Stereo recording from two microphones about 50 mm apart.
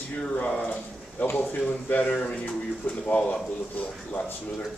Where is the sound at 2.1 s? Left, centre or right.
Left.